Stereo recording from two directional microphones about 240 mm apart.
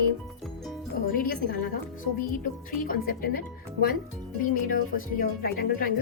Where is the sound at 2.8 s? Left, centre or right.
Left.